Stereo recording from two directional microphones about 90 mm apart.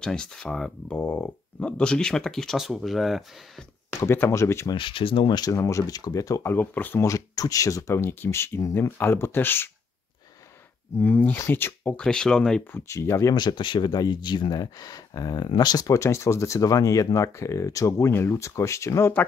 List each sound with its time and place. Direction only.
0.0 s speech: 10° left (ahead or behind)
4.0 s speech: 30° left (ahead or behind)
4.7 s speech: 75° left (ahead or behind)
5.5 s speech: 35° left (ahead or behind)
6.5 s speech: 20° left (ahead or behind)
7.1 s speech: 40° left (ahead or behind); by 9.7 s 25° left (ahead or behind)
11.0 s speech: 20° left (ahead or behind)
12.0 s speech: 10° left (ahead or behind)
12.7 s speech: 35° left (ahead or behind)
13.3 s speech: 50° left (ahead or behind); by 19.1 s 30° left (ahead or behind)